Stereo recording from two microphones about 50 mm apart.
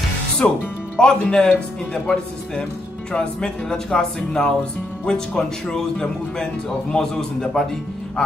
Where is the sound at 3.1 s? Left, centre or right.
Centre.